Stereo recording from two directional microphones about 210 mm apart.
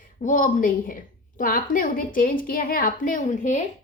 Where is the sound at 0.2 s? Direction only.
40° left (ahead or behind).